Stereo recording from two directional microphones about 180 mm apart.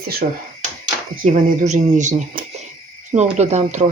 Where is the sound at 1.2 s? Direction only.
40° right (ahead or behind).